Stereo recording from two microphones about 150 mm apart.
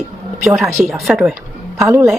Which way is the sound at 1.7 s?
20° right (ahead or behind).